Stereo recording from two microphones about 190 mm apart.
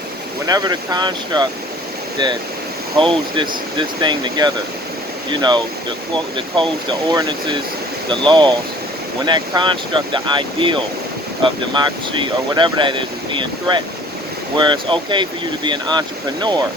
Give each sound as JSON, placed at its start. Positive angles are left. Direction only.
{"t": 0.4, "sound": "speech", "side_deg": -20}
{"t": 3.0, "sound": "speech", "side_deg": -25}